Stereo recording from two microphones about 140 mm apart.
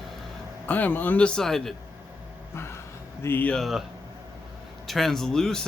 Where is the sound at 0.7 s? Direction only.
10° left (ahead or behind).